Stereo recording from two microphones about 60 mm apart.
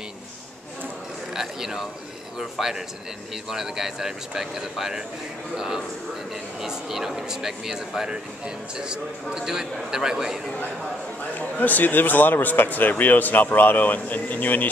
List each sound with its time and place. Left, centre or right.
1.3 s a man's voice: centre
11.3 s speech: left